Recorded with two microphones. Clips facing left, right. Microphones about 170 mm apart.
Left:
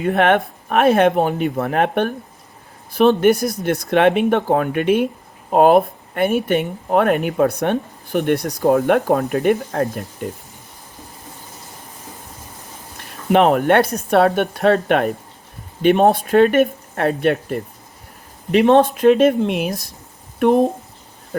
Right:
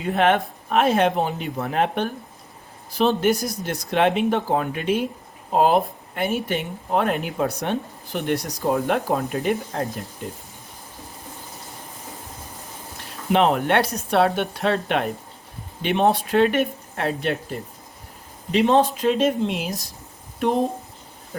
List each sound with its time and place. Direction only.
0.0 s speech: 60° left (ahead or behind)
13.3 s speech: 55° left (ahead or behind)